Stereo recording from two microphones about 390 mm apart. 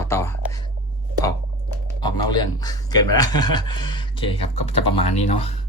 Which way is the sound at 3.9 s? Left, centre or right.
Centre.